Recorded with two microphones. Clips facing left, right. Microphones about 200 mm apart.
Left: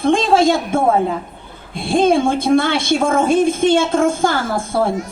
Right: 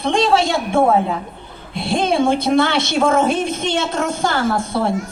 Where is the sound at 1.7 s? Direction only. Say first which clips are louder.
Left 4 dB; 50° left (ahead or behind).